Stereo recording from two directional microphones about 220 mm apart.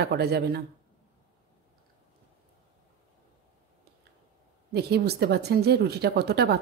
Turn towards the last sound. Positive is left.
turn(degrees=-45)  # may be behind; listen again after turning